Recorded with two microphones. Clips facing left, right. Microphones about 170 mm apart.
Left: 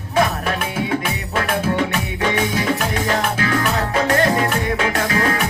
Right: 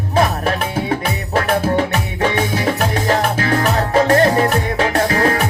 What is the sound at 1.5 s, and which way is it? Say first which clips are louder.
Music: right 3 dB; 40° right (ahead or behind).